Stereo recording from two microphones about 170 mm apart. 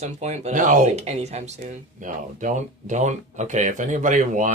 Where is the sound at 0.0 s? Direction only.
40° right (ahead or behind).